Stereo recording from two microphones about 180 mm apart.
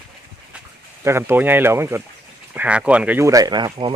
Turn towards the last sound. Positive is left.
turn(degrees=-25)  # may be behind; listen again after turning